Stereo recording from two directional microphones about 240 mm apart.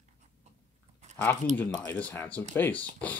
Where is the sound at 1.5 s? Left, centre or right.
Centre.